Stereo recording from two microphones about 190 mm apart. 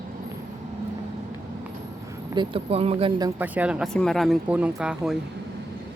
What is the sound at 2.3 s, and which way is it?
Speech, 25° right (ahead or behind).